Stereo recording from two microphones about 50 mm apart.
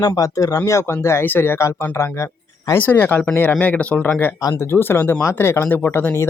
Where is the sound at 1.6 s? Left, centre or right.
Left.